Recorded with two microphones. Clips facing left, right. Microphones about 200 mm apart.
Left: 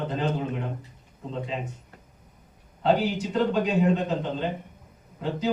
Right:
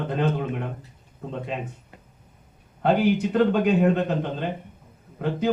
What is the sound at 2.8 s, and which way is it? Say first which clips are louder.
A man's voice: right 3 dB; 55° right (ahead or behind).